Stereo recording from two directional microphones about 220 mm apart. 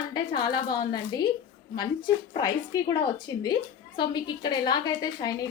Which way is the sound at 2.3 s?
15° left (ahead or behind).